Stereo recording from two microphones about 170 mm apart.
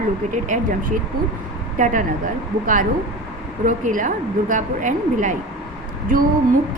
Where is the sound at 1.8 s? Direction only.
50° right (ahead or behind).